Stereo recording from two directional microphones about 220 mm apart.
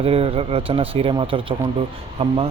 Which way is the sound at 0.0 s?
25° right (ahead or behind).